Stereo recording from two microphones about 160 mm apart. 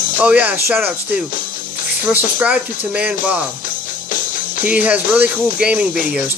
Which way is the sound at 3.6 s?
55° left (ahead or behind).